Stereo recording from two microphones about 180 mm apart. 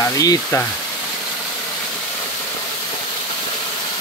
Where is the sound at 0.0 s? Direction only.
20° left (ahead or behind).